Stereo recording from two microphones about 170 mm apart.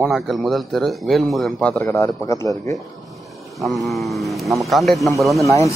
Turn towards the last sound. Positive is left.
turn(degrees=15)  # may be behind; listen again after turning